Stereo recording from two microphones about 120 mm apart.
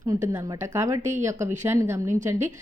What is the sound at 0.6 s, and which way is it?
Speech, 25° right (ahead or behind).